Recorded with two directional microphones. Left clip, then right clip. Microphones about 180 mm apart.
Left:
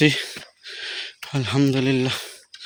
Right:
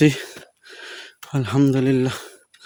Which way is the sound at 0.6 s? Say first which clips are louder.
Left 7 dB; 30° right (ahead or behind).